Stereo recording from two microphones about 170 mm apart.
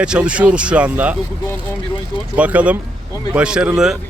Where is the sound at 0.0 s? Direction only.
5° right (ahead or behind).